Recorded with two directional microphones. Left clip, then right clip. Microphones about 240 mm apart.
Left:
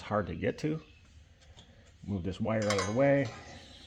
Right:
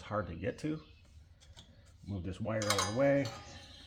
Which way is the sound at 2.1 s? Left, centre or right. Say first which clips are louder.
Left 5 dB; left.